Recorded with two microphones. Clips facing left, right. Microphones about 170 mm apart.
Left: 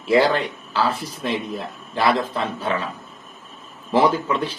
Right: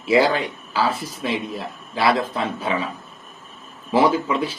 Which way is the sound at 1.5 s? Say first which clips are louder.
Left 1 dB; centre (ahead or behind).